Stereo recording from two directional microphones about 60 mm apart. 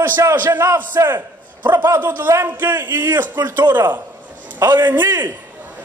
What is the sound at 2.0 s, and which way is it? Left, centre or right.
A man's voice, right.